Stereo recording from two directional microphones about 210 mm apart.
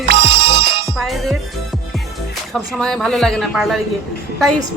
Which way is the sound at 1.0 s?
Centre (ahead or behind).